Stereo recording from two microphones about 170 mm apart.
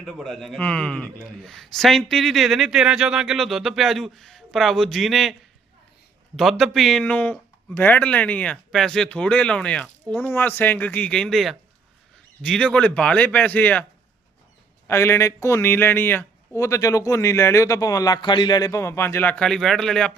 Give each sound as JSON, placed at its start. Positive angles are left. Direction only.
{"t": 0.0, "sound": "a man's voice", "side_deg": 0}
{"t": 6.3, "sound": "speech", "side_deg": 0}
{"t": 14.8, "sound": "speech", "side_deg": 15}